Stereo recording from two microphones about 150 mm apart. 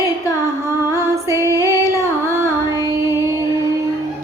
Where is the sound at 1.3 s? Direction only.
20° right (ahead or behind).